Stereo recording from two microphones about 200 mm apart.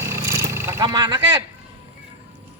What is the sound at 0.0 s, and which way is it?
Vehicle, 15° right (ahead or behind).